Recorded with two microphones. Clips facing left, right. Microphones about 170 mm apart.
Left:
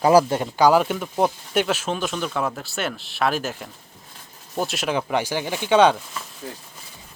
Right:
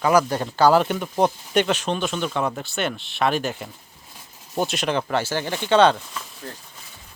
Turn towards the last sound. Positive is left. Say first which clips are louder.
# left 1 dB
turn(degrees=10)  # may be behind; listen again after turning